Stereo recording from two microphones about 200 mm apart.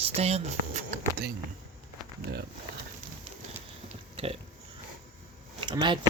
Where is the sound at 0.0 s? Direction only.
30° right (ahead or behind).